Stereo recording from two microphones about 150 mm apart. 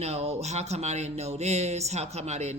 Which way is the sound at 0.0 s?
45° right (ahead or behind).